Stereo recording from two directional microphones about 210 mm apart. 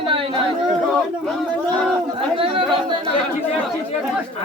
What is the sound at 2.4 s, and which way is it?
Chatter, 25° right (ahead or behind).